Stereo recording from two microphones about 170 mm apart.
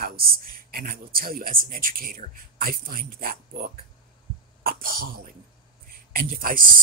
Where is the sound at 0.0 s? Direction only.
60° right (ahead or behind).